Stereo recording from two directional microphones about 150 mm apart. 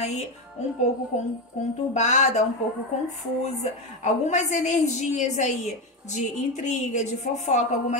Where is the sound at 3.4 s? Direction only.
50° left (ahead or behind).